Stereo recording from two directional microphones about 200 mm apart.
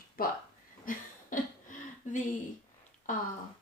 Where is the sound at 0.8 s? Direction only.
40° left (ahead or behind).